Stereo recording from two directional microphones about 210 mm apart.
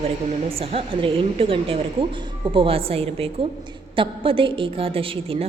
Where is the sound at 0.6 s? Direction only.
25° right (ahead or behind).